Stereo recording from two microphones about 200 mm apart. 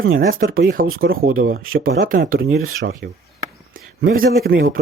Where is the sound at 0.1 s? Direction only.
45° right (ahead or behind).